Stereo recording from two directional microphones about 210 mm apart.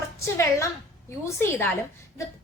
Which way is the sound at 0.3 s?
15° left (ahead or behind).